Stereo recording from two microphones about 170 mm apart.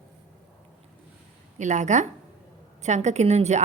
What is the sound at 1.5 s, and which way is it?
A woman's voice, 45° right (ahead or behind).